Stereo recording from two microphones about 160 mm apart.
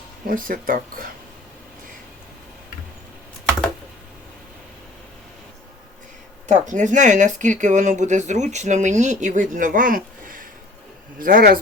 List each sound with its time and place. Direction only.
0.3 s speech: 60° right (ahead or behind)
6.5 s speech: 50° right (ahead or behind)